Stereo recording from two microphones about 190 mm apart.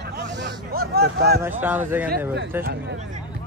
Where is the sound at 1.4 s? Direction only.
10° right (ahead or behind).